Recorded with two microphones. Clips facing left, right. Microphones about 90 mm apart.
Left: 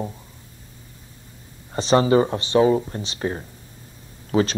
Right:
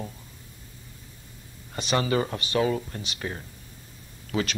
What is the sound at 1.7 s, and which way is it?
A man's voice, 30° left (ahead or behind).